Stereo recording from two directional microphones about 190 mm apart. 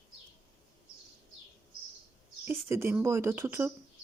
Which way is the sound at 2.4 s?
15° right (ahead or behind).